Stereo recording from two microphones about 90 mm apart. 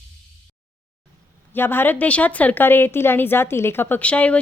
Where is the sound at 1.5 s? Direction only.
25° left (ahead or behind).